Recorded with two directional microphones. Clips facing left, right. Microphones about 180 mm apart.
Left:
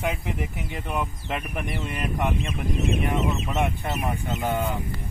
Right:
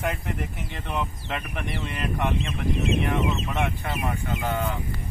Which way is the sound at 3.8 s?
20° left (ahead or behind).